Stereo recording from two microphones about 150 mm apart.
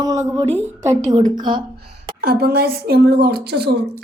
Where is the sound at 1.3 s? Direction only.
30° right (ahead or behind).